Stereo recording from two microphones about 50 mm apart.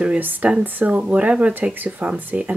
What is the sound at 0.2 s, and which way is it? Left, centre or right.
Speech, right.